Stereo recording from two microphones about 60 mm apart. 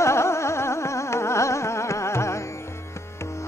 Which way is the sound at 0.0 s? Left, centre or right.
Left.